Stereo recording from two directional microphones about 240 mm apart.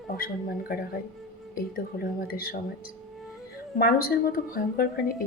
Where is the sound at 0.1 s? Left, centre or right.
Left.